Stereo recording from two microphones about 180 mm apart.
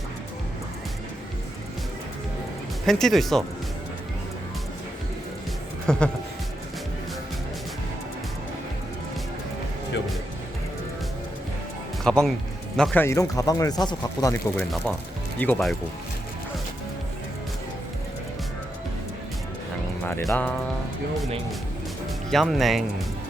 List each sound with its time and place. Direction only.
2.8 s speech: centre (ahead or behind)
5.9 s speech: 5° left (ahead or behind)
12.0 s speech: 5° left (ahead or behind)
20.2 s speech: 5° left (ahead or behind)
22.3 s speech: centre (ahead or behind)